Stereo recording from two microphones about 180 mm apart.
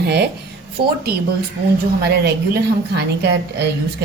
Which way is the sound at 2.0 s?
65° right (ahead or behind).